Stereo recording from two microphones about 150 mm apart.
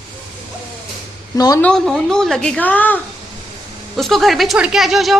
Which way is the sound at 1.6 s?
5° left (ahead or behind).